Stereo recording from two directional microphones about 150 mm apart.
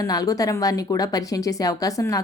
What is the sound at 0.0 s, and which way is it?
A woman's voice, 25° left (ahead or behind).